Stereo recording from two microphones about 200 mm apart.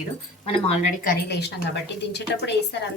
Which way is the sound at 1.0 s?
55° left (ahead or behind).